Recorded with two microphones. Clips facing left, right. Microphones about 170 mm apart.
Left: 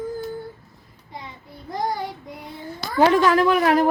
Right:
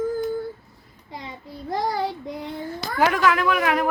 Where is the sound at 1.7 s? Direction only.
90° right.